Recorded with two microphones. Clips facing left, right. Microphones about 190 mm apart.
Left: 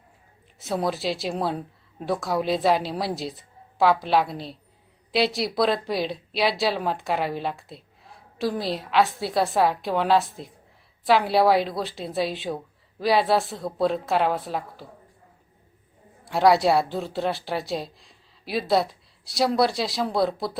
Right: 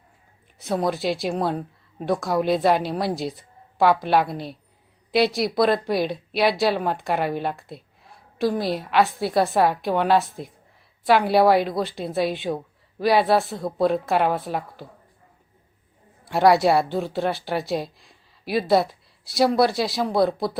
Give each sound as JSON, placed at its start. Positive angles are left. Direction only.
{"t": 0.6, "sound": "speech", "side_deg": 0}
{"t": 3.2, "sound": "a sound", "side_deg": 0}
{"t": 4.3, "sound": "a woman's voice", "side_deg": -55}
{"t": 5.1, "sound": "speech", "side_deg": 0}
{"t": 16.2, "sound": "speech", "side_deg": 0}